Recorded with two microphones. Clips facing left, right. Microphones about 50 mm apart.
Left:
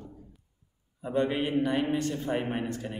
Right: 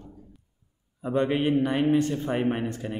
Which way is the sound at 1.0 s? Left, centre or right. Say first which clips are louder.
Right 4 dB; right.